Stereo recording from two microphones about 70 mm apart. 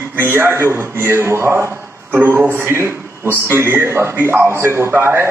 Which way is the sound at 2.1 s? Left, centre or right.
Right.